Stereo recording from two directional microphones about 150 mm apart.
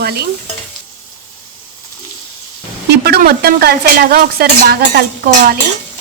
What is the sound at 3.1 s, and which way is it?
Stir, 90° right.